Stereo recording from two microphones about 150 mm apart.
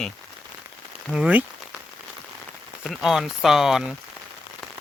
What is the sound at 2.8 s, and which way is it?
Speech, centre (ahead or behind).